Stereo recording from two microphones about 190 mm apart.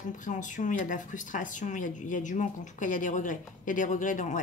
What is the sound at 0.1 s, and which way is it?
Speech, 40° left (ahead or behind).